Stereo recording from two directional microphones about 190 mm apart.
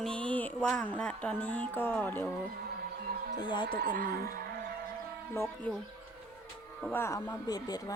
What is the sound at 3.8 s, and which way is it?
Speech, 50° right (ahead or behind).